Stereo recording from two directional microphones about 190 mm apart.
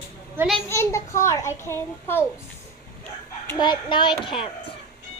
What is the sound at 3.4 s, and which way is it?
A child's voice, 25° left (ahead or behind).